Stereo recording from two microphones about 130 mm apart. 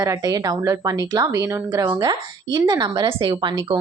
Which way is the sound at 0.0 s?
30° right (ahead or behind).